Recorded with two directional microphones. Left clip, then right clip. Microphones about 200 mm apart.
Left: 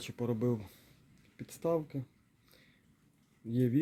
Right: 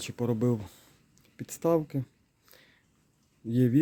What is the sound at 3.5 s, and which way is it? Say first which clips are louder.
Speech: right 6 dB; 25° right (ahead or behind).